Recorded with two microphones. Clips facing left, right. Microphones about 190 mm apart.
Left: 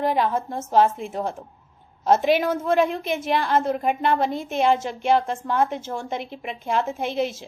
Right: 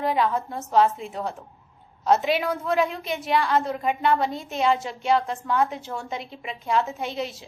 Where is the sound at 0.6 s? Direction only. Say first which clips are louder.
Left 1 dB; 50° left (ahead or behind).